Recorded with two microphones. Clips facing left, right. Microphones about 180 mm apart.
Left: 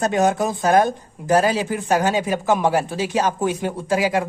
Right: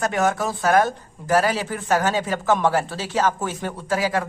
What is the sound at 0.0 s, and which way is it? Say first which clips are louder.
Speech: left 3 dB; 20° left (ahead or behind).